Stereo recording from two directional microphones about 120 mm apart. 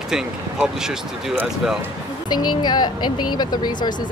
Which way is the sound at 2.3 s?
35° left (ahead or behind).